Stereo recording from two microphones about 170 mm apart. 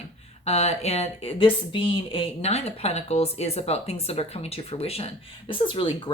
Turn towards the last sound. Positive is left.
turn(degrees=30)  # may be behind; listen again after turning